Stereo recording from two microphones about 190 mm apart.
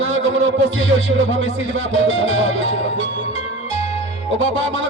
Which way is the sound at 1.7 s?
90° right.